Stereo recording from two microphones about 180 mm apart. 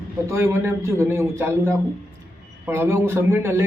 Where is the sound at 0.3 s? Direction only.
15° right (ahead or behind).